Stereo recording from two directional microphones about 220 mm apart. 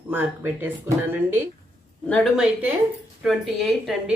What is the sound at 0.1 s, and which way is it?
A woman's voice, 10° right (ahead or behind).